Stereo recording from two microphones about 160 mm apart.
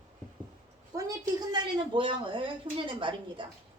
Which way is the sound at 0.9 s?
25° right (ahead or behind).